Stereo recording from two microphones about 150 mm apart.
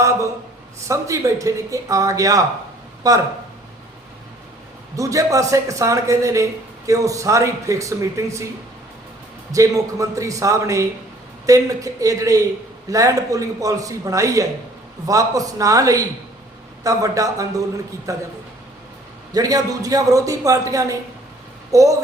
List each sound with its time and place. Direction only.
0.0 s a man's voice: 20° right (ahead or behind)
4.9 s a man's voice: 20° right (ahead or behind)
9.5 s a man's voice: 20° right (ahead or behind)
19.3 s a man's voice: 25° right (ahead or behind)